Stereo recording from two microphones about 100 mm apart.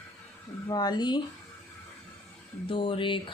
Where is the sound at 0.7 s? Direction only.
45° left (ahead or behind).